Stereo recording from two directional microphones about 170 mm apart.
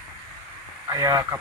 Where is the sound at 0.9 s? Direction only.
20° right (ahead or behind).